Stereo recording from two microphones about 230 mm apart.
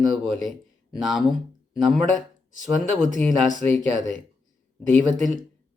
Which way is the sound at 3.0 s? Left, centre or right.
Right.